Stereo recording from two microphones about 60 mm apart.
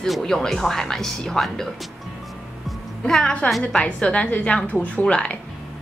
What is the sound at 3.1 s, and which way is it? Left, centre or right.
A woman's voice, centre.